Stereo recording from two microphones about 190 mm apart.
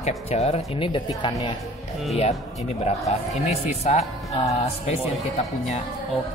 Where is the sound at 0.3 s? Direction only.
35° left (ahead or behind).